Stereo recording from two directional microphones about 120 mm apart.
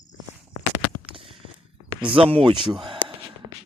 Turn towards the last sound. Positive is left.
turn(degrees=-45)  # may be behind; listen again after turning